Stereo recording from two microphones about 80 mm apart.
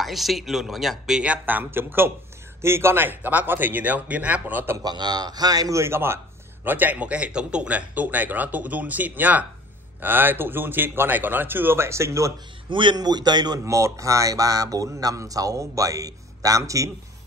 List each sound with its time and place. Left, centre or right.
0.0 s a man's voice: centre; by 4.7 s right
4.7 s a man's voice: right
12.6 s a man's voice: right
12.9 s a man's voice: right
13.7 s speech: right